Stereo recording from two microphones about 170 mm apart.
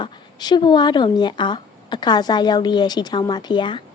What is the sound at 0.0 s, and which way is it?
A woman's voice, 25° left (ahead or behind).